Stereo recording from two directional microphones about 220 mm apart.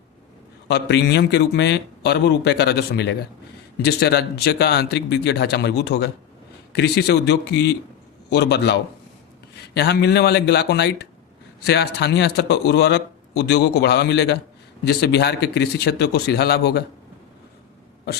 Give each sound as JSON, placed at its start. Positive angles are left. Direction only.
{"t": 0.7, "sound": "speech", "side_deg": 50}